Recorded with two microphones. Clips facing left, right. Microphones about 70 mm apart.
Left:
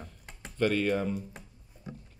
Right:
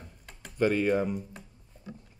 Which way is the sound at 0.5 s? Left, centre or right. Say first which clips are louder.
Right 2 dB; centre.